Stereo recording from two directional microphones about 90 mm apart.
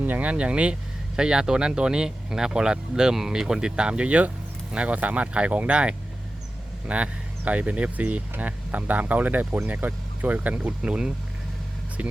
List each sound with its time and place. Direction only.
0.0 s speech: 20° right (ahead or behind)